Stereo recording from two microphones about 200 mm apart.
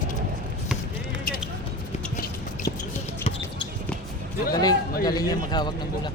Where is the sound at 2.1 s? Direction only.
50° left (ahead or behind).